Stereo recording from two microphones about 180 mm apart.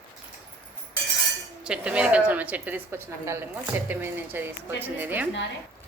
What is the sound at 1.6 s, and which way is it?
Speech, 5° right (ahead or behind).